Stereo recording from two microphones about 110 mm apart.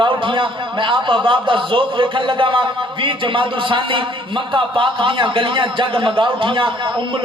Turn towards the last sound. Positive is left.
turn(degrees=-45)  # may be behind; listen again after turning